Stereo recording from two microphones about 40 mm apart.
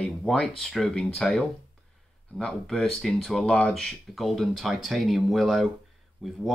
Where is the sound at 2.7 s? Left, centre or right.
Centre.